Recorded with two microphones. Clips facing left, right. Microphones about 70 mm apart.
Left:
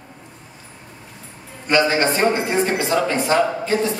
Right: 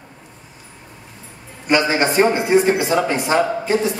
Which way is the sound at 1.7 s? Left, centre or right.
Centre.